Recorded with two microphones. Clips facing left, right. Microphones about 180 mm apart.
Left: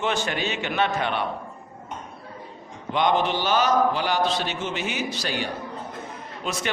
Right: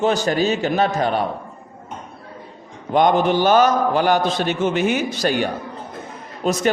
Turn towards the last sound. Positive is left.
turn(degrees=-40)  # may be behind; listen again after turning